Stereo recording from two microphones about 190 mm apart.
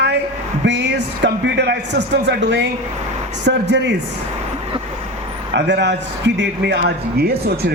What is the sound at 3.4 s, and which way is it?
Speech, 65° right (ahead or behind).